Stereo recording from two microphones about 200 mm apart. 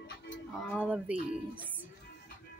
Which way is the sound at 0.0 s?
60° left (ahead or behind).